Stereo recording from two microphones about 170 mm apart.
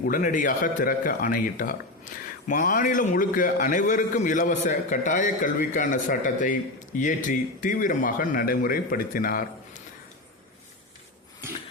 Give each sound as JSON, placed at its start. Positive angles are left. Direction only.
{"t": 0.0, "sound": "a man's voice", "side_deg": 55}